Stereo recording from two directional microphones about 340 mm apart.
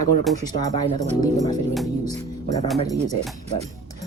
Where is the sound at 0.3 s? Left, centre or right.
Centre.